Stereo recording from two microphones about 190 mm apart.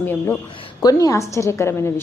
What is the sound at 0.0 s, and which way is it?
A woman's voice, 10° left (ahead or behind).